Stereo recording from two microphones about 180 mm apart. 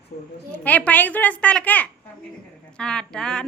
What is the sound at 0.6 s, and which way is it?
A child's voice, 10° left (ahead or behind).